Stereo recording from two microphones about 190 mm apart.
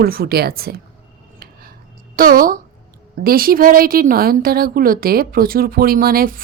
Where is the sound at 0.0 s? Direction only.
55° right (ahead or behind).